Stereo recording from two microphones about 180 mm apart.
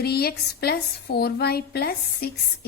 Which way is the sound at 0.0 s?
60° left (ahead or behind).